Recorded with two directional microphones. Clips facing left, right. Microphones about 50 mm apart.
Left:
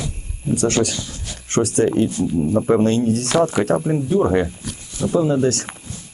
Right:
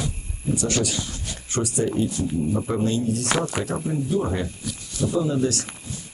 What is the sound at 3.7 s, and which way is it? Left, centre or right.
Speech, left.